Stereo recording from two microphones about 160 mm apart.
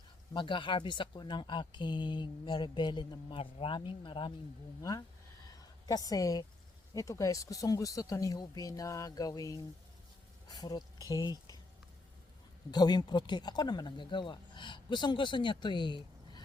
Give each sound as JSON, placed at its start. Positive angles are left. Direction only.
{"t": 0.3, "sound": "speech", "side_deg": 30}
{"t": 12.7, "sound": "speech", "side_deg": 25}